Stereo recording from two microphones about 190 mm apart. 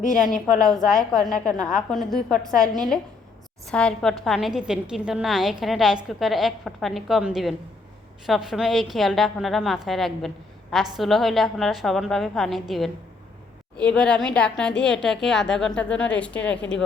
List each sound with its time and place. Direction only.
0.0 s a woman's voice: 45° left (ahead or behind)
1.6 s a woman's voice: centre (ahead or behind)